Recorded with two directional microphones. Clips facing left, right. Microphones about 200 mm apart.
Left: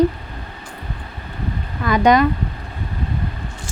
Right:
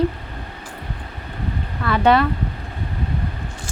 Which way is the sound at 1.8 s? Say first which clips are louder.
Left 2 dB; 15° left (ahead or behind).